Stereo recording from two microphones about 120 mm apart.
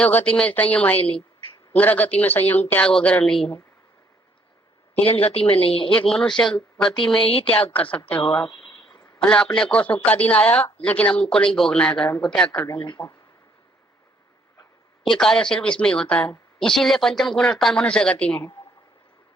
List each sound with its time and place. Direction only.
0.0 s a woman's voice: 10° left (ahead or behind)
5.0 s speech: 55° left (ahead or behind)
5.9 s speech: 5° left (ahead or behind)
7.2 s speech: 50° left (ahead or behind)
7.7 s a woman's voice: 10° left (ahead or behind)
8.4 s a sound: 40° left (ahead or behind)
9.1 s a woman's voice: 5° left (ahead or behind)
12.6 s speech: 40° left (ahead or behind)
15.1 s a woman's voice: 5° left (ahead or behind)